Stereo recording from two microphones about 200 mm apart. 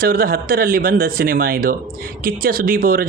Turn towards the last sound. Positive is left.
turn(degrees=-45)  # may be behind; listen again after turning